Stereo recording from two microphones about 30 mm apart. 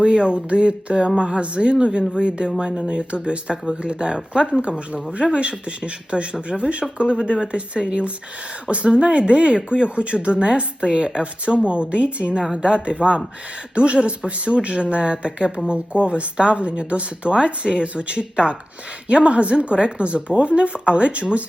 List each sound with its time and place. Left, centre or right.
0.0 s a woman's voice: right